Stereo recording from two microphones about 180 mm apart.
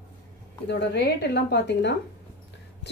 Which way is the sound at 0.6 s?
70° left (ahead or behind).